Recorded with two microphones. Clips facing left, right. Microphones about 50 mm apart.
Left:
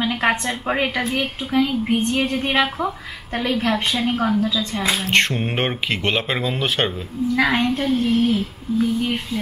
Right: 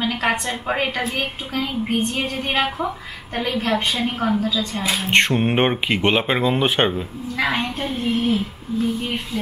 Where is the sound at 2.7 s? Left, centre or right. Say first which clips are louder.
Even; centre.